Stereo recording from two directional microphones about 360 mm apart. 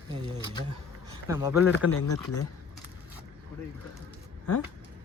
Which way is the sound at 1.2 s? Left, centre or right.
Centre.